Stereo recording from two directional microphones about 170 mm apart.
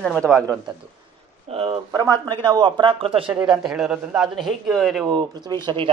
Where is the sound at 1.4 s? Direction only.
35° right (ahead or behind).